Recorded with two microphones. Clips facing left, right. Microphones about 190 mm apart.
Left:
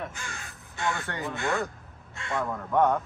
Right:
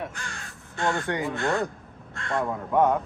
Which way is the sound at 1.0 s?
15° right (ahead or behind).